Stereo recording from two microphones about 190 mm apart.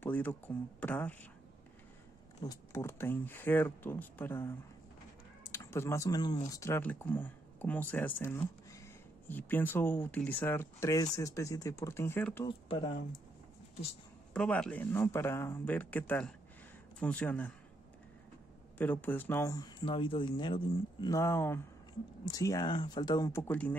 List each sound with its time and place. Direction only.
0.0 s speech: 10° left (ahead or behind)
2.4 s speech: 15° left (ahead or behind)
12.4 s speech: 25° left (ahead or behind)
14.3 s speech: 5° left (ahead or behind)
18.8 s speech: 10° left (ahead or behind)